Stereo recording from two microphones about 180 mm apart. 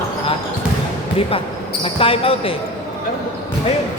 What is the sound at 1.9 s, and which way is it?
Speech, 30° left (ahead or behind).